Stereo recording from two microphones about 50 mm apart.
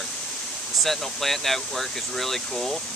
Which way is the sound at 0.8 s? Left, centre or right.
Centre.